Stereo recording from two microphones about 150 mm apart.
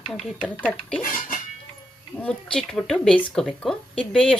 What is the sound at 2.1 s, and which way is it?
A woman's voice, 5° left (ahead or behind).